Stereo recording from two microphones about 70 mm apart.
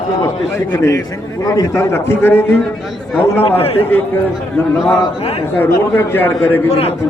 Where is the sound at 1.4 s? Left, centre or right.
Left.